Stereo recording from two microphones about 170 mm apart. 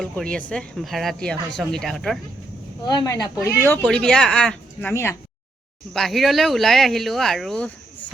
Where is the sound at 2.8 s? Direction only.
20° left (ahead or behind).